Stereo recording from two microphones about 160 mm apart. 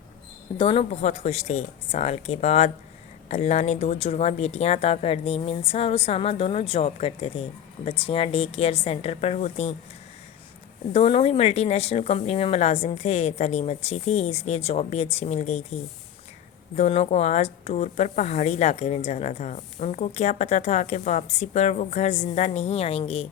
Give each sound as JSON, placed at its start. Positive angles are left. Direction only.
{"t": 0.5, "sound": "a woman's voice", "side_deg": 35}
{"t": 10.9, "sound": "a woman's voice", "side_deg": 40}
{"t": 16.7, "sound": "speech", "side_deg": 45}